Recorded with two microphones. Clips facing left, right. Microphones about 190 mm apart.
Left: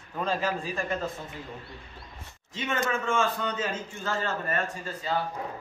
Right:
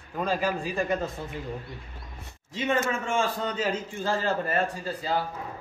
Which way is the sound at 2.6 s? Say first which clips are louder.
Right 2 dB; 35° right (ahead or behind).